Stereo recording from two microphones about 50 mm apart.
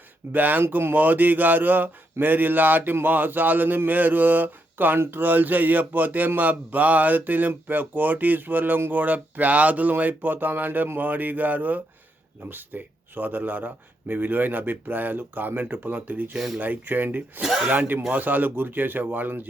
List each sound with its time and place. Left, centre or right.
0.3 s speech: right
0.7 s speech: right
0.9 s speech: right
17.4 s speech: centre
17.7 s speech: right